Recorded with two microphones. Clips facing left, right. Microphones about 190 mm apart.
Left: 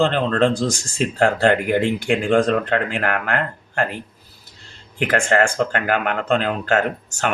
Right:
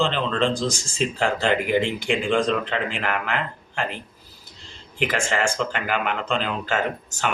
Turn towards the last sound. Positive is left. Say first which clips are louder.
# left 3 dB
turn(degrees=60)  # may be behind; listen again after turning